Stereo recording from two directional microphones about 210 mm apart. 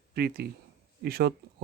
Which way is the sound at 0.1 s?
50° right (ahead or behind).